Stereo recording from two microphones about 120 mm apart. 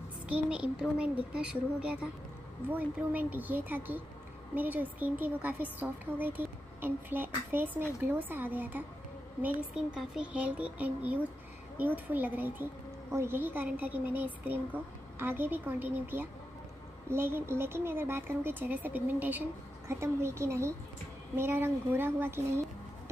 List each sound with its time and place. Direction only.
0.3 s a woman's voice: 10° right (ahead or behind)
9.9 s a woman's voice: 10° right (ahead or behind)